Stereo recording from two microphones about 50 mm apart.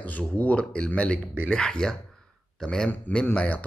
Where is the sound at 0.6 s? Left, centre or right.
Left.